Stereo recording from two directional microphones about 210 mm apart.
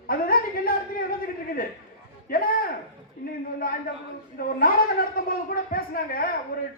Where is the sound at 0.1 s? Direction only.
45° left (ahead or behind).